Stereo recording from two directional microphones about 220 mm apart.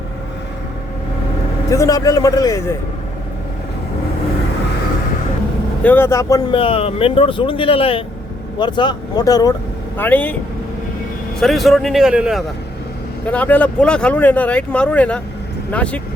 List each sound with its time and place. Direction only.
1.7 s speech: 15° left (ahead or behind)
5.8 s speech: 10° left (ahead or behind)
11.3 s speech: centre (ahead or behind)